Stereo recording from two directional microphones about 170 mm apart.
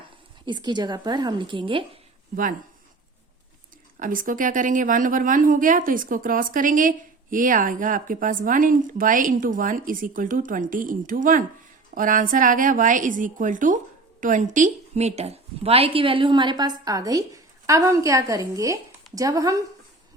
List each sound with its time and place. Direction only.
0.4 s a woman's voice: 25° right (ahead or behind)
2.3 s speech: 55° right (ahead or behind)
4.0 s a woman's voice: 55° right (ahead or behind); by 19.6 s 20° right (ahead or behind)